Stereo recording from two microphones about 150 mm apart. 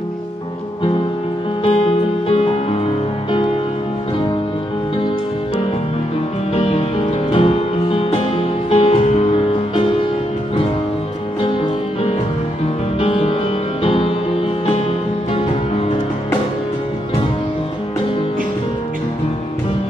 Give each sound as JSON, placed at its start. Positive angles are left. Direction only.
{"t": 1.6, "sound": "music", "side_deg": 35}
{"t": 6.5, "sound": "music", "side_deg": 40}
{"t": 13.0, "sound": "music", "side_deg": 35}